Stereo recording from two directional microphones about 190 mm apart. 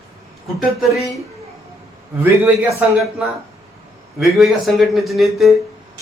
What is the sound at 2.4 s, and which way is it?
Speech, 15° right (ahead or behind).